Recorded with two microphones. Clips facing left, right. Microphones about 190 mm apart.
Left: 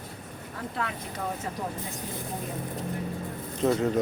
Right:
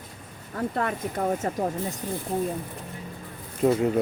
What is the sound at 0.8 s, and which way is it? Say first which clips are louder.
Speech: right 5 dB; 50° right (ahead or behind).